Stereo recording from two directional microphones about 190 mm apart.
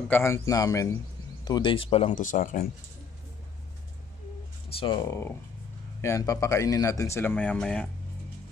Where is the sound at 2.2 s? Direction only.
45° left (ahead or behind).